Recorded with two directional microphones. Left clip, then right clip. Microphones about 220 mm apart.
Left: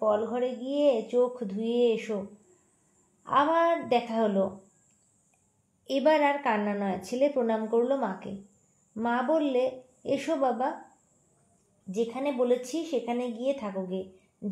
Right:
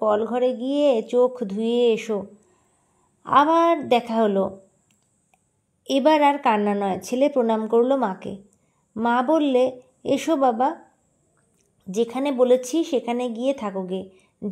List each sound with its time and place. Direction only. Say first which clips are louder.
0.0 s a woman's voice: right 6 dB; 50° right (ahead or behind)
3.3 s a woman's voice: right 7 dB; 50° right (ahead or behind)
5.9 s a woman's voice: right 6 dB; 45° right (ahead or behind)
11.9 s a woman's voice: right 6 dB; 45° right (ahead or behind)